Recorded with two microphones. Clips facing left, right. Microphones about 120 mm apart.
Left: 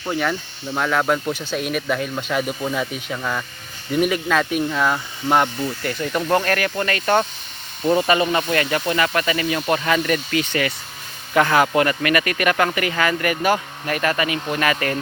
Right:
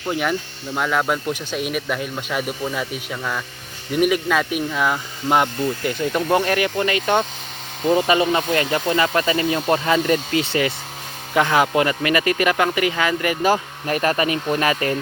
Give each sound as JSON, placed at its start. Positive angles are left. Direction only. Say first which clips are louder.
{"t": 0.1, "sound": "speech", "louder": "right 1 dB", "side_deg": -10}
{"t": 11.3, "sound": "speech", "louder": "left 1 dB", "side_deg": -15}
{"t": 13.5, "sound": "speech", "louder": "right 1 dB", "side_deg": -30}